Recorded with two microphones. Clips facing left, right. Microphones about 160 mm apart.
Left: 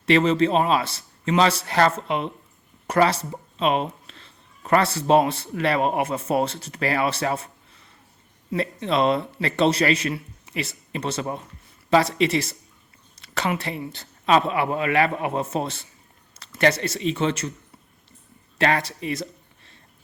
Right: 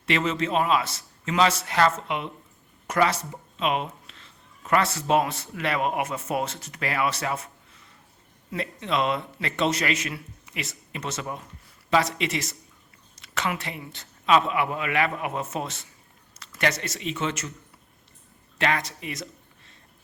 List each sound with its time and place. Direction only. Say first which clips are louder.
0.0 s speech: left 7 dB; 35° left (ahead or behind)
18.5 s speech: left 4 dB; 35° left (ahead or behind)